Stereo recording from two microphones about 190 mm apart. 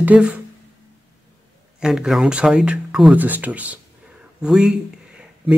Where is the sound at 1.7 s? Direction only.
5° right (ahead or behind).